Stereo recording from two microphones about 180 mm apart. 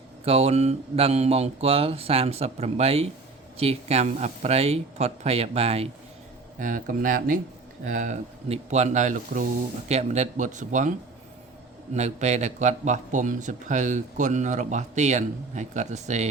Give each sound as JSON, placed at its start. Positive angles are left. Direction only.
{"t": 0.3, "sound": "a man's voice", "side_deg": -35}
{"t": 6.6, "sound": "a man's voice", "side_deg": -45}
{"t": 11.9, "sound": "a man's voice", "side_deg": -40}